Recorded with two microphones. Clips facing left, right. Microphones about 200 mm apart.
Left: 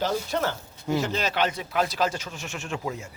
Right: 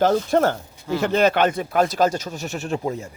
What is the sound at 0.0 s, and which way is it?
Speech, 50° right (ahead or behind).